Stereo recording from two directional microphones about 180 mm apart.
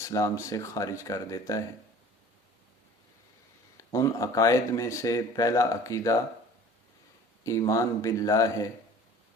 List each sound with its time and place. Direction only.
0.0 s speech: 15° left (ahead or behind)
3.8 s speech: 20° left (ahead or behind)
7.4 s speech: 15° left (ahead or behind)